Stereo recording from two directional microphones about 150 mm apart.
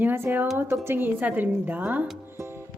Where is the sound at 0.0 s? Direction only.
15° right (ahead or behind).